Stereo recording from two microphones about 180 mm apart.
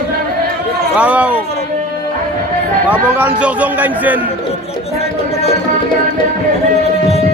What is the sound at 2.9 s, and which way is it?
Speech, 5° right (ahead or behind).